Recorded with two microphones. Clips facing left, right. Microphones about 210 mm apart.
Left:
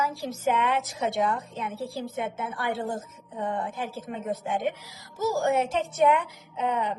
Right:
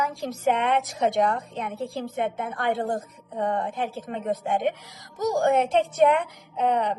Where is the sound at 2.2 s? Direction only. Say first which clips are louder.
Right 5 dB; 55° right (ahead or behind).